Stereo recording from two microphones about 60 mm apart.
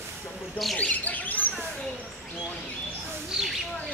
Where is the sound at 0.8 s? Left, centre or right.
Left.